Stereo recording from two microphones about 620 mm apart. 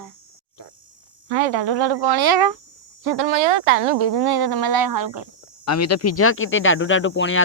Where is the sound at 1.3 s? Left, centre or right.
Right.